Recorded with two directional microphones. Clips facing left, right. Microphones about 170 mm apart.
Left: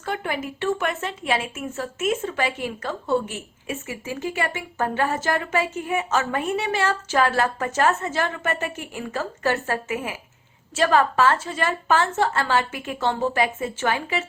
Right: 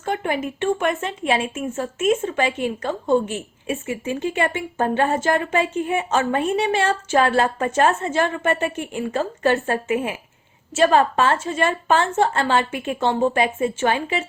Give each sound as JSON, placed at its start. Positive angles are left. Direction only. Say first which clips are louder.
{"t": 0.0, "sound": "a woman's voice", "louder": "right 4 dB", "side_deg": -20}